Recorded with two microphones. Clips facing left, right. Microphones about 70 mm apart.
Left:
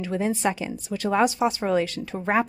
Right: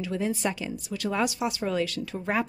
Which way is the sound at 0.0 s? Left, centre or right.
Left.